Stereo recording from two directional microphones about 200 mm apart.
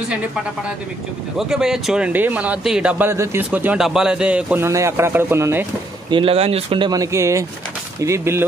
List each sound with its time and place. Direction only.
1.5 s a man's voice: 5° right (ahead or behind)
6.0 s a man's voice: 25° right (ahead or behind)